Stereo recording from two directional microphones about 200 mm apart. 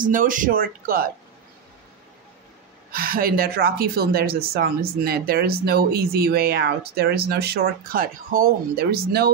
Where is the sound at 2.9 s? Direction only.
50° right (ahead or behind).